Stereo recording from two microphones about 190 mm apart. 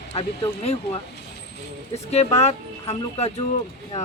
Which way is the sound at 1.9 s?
35° left (ahead or behind).